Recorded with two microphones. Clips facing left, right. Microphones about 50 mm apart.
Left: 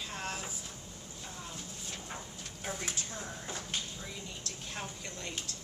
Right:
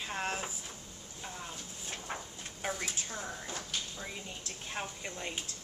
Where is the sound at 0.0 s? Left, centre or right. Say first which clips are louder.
Right 3 dB; right.